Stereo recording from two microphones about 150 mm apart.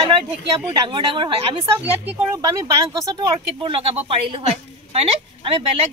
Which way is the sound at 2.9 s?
30° right (ahead or behind).